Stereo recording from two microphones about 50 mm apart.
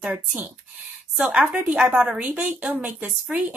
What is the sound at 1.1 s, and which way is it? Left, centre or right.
A woman's voice, right.